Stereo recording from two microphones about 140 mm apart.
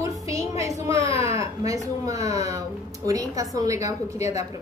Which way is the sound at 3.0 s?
25° right (ahead or behind).